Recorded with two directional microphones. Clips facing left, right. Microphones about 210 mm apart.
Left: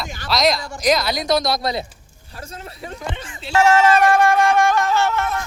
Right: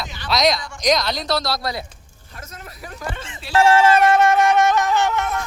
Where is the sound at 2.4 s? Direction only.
30° left (ahead or behind).